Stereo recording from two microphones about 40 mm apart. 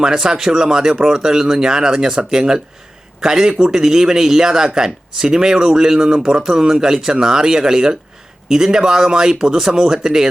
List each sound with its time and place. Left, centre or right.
0.0 s speech: centre